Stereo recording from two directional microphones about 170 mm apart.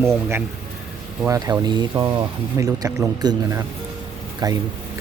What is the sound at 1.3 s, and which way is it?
Speech, 20° right (ahead or behind).